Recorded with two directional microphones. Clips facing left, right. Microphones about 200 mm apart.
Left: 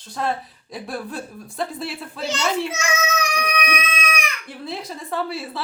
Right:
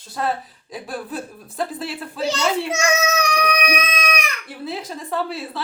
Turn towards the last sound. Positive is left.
turn(degrees=0)  # may be behind; listen again after turning